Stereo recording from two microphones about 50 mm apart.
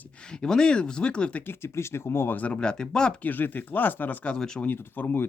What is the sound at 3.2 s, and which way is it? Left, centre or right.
Speech, left.